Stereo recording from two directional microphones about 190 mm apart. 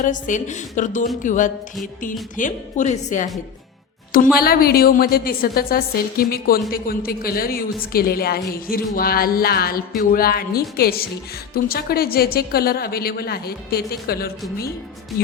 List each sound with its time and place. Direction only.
0.0 s a woman's voice: 40° left (ahead or behind)
4.4 s a woman's voice: 50° left (ahead or behind)